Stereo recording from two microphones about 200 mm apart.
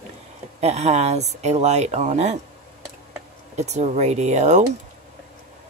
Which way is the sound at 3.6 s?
35° right (ahead or behind).